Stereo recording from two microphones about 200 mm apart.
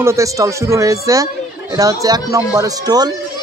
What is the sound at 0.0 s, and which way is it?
Speech, 15° right (ahead or behind).